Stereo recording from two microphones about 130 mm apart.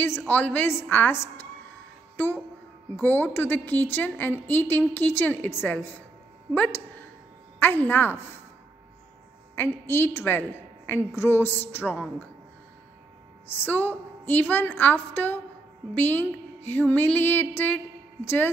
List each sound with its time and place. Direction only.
0.3 s a woman's voice: 10° left (ahead or behind)
3.0 s a woman's voice: 15° left (ahead or behind)
9.6 s a woman's voice: 15° left (ahead or behind)
13.7 s a woman's voice: 15° left (ahead or behind)